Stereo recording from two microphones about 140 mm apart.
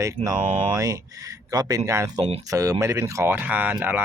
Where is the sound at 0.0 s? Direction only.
20° right (ahead or behind).